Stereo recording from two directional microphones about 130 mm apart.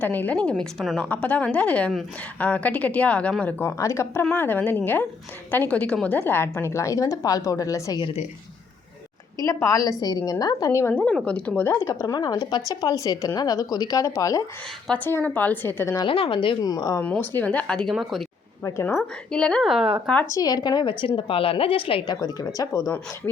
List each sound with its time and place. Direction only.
0.0 s a woman's voice: 15° left (ahead or behind)
9.4 s a woman's voice: 25° left (ahead or behind)
10.9 s a woman's voice: 10° left (ahead or behind)
14.9 s speech: 15° left (ahead or behind)
16.0 s a woman's voice: 45° left (ahead or behind)
17.0 s a woman's voice: 10° left (ahead or behind); by 20.0 s 5° right (ahead or behind)
20.2 s a woman's voice: 30° left (ahead or behind)